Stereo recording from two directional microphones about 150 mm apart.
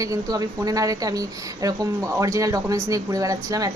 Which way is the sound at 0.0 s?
25° right (ahead or behind).